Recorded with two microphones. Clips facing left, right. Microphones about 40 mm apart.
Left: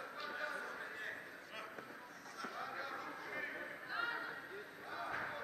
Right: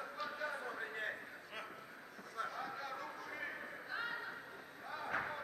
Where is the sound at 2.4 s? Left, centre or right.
Right.